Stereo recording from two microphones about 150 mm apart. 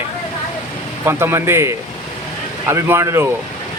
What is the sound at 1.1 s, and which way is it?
Speech, 15° right (ahead or behind).